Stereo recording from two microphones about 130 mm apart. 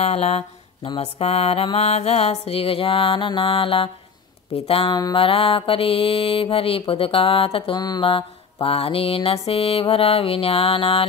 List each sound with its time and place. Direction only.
0.0 s mantra: 50° left (ahead or behind)